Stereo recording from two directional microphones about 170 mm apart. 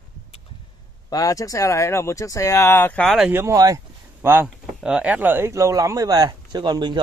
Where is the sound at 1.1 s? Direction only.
20° left (ahead or behind).